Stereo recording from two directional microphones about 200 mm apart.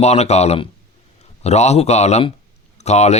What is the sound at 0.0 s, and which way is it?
A man's voice, 35° left (ahead or behind).